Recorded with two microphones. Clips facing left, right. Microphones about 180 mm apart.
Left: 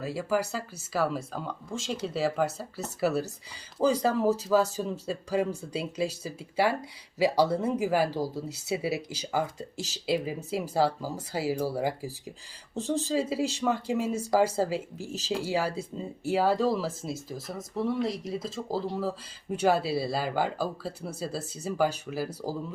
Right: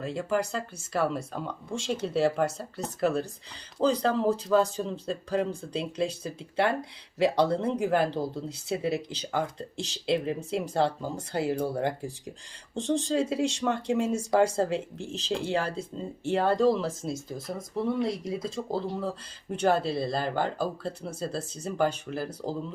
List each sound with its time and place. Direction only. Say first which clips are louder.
0.0 s speech: even; 5° left (ahead or behind)